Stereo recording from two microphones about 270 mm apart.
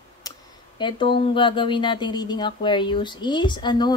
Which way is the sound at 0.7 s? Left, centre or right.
Centre.